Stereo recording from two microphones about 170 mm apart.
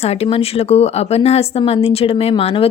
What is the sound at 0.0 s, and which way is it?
A woman's voice, 35° left (ahead or behind).